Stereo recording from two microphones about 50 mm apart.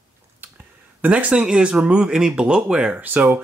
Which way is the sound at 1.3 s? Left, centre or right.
Centre.